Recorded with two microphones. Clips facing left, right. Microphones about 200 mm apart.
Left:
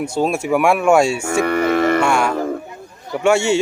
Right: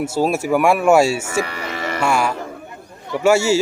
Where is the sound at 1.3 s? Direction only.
55° left (ahead or behind).